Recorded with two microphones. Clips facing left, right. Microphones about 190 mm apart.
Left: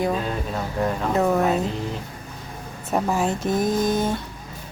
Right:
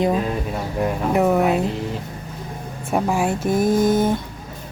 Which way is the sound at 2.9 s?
10° right (ahead or behind).